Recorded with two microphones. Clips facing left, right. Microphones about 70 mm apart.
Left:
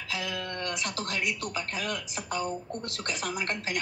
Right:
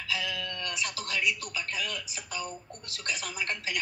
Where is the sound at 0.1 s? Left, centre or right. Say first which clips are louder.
Even; left.